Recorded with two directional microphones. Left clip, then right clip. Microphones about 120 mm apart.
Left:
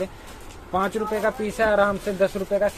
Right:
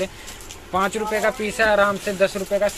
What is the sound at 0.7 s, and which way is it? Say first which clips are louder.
Speech: right 2 dB; 15° left (ahead or behind).